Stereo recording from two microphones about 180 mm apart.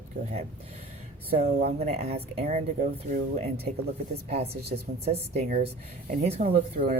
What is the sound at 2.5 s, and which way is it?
Speech, 50° right (ahead or behind).